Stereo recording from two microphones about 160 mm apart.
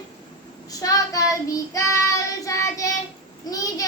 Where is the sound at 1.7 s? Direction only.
20° left (ahead or behind).